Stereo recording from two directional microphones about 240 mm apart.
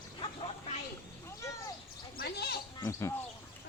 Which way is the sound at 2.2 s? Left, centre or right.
Left.